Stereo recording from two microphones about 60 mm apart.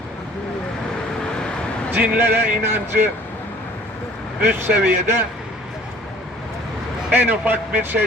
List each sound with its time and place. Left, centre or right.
1.9 s speech: right
4.4 s speech: right
7.1 s speech: right